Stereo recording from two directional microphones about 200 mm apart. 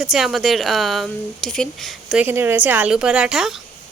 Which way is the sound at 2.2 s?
10° right (ahead or behind).